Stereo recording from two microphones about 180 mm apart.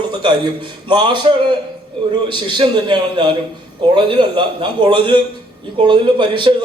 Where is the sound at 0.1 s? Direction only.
25° right (ahead or behind).